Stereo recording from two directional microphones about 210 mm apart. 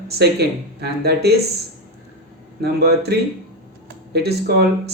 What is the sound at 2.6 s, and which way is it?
Speech, 50° right (ahead or behind).